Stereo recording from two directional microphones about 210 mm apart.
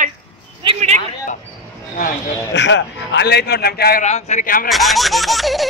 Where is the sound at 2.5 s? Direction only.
60° left (ahead or behind); by 4.6 s 40° left (ahead or behind).